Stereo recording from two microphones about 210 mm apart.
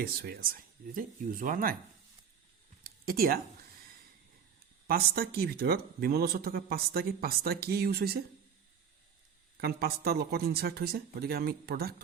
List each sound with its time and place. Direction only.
0.0 s a man's voice: 45° right (ahead or behind)
2.8 s a sound: 45° right (ahead or behind)
4.9 s a man's voice: 45° right (ahead or behind)
9.6 s a man's voice: 50° right (ahead or behind)